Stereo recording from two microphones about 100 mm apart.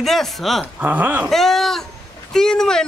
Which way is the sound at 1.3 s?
5° left (ahead or behind).